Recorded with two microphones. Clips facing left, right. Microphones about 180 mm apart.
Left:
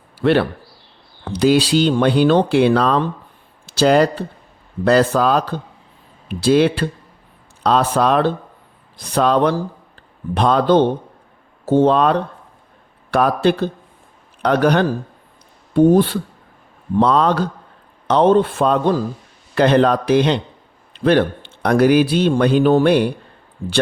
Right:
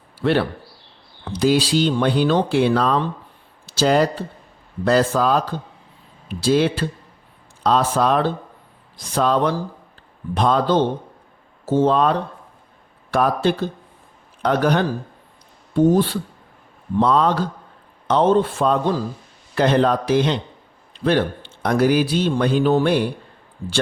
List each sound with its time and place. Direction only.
0.2 s a man's voice: 65° left (ahead or behind)
15.7 s speech: 60° left (ahead or behind)
17.0 s a man's voice: 70° left (ahead or behind)